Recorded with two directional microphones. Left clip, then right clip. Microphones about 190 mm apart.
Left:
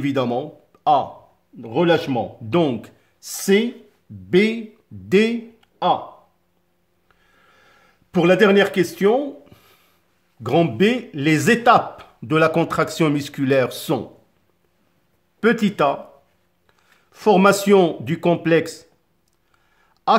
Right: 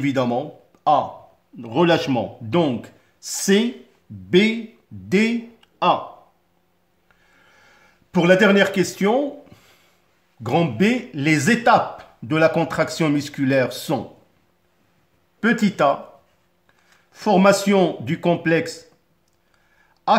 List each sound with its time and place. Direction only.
0.0 s speech: 25° left (ahead or behind)
7.5 s a sound: 25° left (ahead or behind)
10.4 s speech: 25° left (ahead or behind)
15.4 s speech: 25° left (ahead or behind)
17.1 s speech: 30° left (ahead or behind)
20.1 s a man's voice: 30° left (ahead or behind)